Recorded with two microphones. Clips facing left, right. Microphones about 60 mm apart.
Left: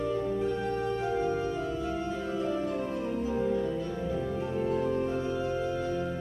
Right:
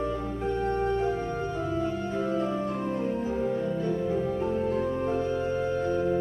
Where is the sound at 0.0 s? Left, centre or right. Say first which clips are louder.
Left 1 dB; right.